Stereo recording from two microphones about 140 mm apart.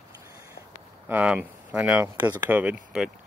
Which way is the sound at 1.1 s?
15° right (ahead or behind).